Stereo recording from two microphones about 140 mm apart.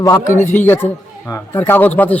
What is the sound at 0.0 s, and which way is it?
A man's voice, 20° left (ahead or behind).